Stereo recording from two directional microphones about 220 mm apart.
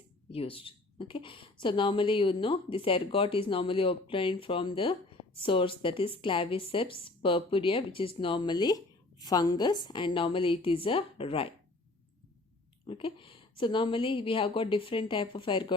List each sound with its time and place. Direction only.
0.3 s a woman's voice: 25° left (ahead or behind)
12.8 s a woman's voice: 25° left (ahead or behind)